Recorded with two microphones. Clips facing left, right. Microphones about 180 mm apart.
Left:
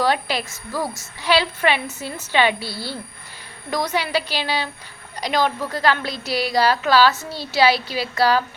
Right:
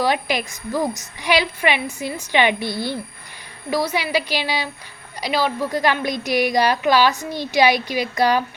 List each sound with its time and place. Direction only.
0.0 s a woman's voice: 15° right (ahead or behind)